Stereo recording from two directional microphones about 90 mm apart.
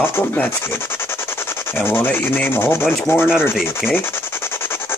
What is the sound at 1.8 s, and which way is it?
Rub, 20° left (ahead or behind).